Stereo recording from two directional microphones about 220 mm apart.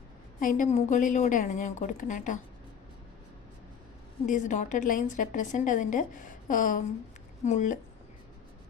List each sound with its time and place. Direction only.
0.3 s a woman's voice: 35° left (ahead or behind)
4.3 s a woman's voice: 35° left (ahead or behind)